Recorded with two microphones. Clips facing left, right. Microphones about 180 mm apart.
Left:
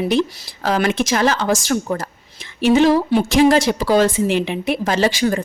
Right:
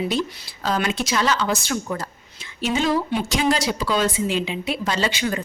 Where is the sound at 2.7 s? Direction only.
70° left (ahead or behind).